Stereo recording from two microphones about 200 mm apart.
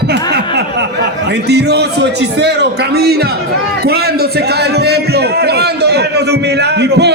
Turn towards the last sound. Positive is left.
turn(degrees=-55)  # may be behind; listen again after turning